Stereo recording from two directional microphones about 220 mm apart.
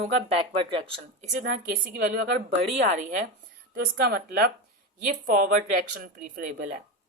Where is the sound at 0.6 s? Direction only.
25° right (ahead or behind).